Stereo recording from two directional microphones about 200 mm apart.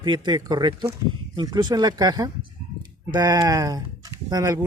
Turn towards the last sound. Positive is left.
turn(degrees=-15)  # may be behind; listen again after turning